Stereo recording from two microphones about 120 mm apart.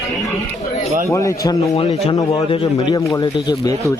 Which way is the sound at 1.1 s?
25° left (ahead or behind).